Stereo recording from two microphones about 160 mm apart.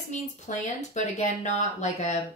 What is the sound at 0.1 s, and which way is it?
Speech, 50° left (ahead or behind).